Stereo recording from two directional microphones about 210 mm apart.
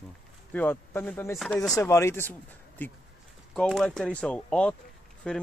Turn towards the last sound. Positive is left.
turn(degrees=5)  # may be behind; listen again after turning